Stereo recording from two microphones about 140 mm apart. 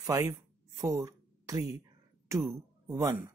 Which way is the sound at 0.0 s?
25° right (ahead or behind).